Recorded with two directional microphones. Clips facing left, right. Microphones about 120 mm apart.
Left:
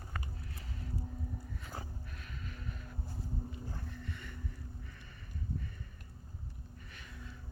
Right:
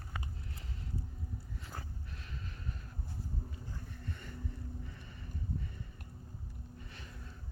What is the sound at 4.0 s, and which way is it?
Boat, 45° right (ahead or behind).